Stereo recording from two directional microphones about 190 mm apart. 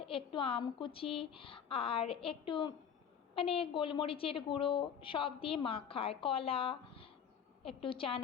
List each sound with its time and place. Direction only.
0.0 s a woman's voice: 30° left (ahead or behind)